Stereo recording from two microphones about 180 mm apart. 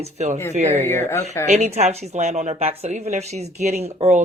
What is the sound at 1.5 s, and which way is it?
Speech, 35° right (ahead or behind).